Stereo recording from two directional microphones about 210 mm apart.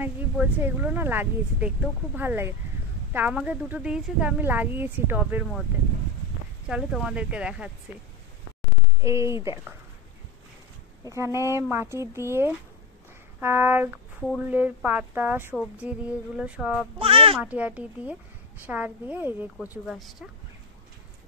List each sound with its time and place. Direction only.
0.0 s a woman's voice: 10° right (ahead or behind)
6.7 s speech: centre (ahead or behind)
9.0 s a woman's voice: 15° right (ahead or behind)
11.1 s a woman's voice: 15° right (ahead or behind)
15.5 s speech: centre (ahead or behind)
17.0 s speech: 25° right (ahead or behind)
17.4 s a woman's voice: 5° right (ahead or behind)